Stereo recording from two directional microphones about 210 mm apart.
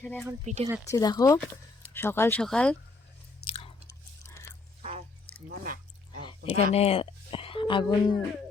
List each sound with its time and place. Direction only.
0.0 s speech: 5° left (ahead or behind)
0.4 s speech: 35° right (ahead or behind)
0.9 s speech: 15° left (ahead or behind)
3.4 s chewing: 50° left (ahead or behind)
4.8 s music: 30° right (ahead or behind)
5.5 s a sound: 45° right (ahead or behind)
6.2 s speech: 25° left (ahead or behind)